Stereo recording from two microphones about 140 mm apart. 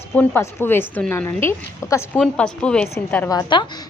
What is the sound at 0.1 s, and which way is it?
A woman's voice, 15° left (ahead or behind).